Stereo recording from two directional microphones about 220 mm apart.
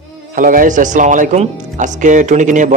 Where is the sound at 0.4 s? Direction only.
40° right (ahead or behind).